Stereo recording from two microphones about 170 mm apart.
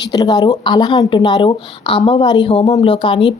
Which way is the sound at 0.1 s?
20° left (ahead or behind).